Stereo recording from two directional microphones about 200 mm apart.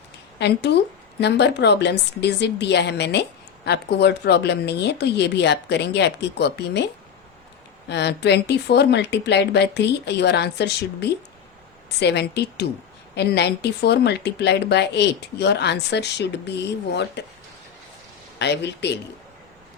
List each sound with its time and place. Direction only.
0.3 s a woman's voice: 60° left (ahead or behind)
7.9 s a woman's voice: 60° left (ahead or behind)
18.3 s a woman's voice: 60° left (ahead or behind)